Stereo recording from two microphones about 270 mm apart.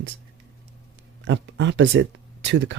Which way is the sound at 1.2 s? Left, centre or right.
Right.